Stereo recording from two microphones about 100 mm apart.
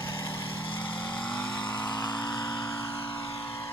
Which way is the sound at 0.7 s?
55° left (ahead or behind).